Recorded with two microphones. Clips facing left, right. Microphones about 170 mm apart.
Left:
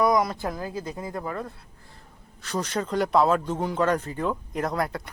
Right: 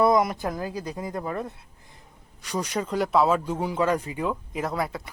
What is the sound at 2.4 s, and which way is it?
Speech, 10° right (ahead or behind).